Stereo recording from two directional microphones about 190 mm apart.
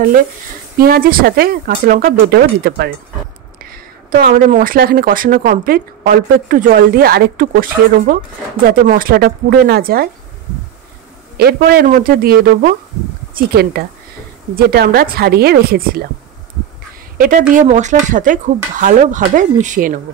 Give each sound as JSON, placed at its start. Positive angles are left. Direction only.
{"t": 0.7, "sound": "speech", "side_deg": -50}
{"t": 3.7, "sound": "speech", "side_deg": -50}
{"t": 11.3, "sound": "speech", "side_deg": -55}
{"t": 17.2, "sound": "speech", "side_deg": -45}